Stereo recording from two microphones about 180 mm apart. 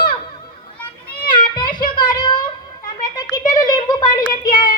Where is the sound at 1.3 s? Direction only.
25° left (ahead or behind).